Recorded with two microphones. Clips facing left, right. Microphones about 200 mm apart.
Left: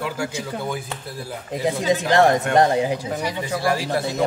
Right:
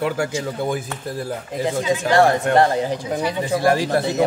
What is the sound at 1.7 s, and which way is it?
Speech, 20° left (ahead or behind).